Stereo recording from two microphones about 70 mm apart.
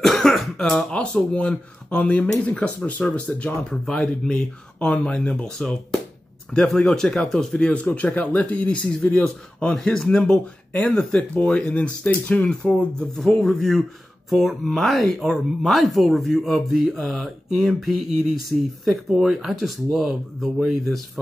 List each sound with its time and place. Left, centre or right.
0.0 s speech: centre
18.9 s speech: centre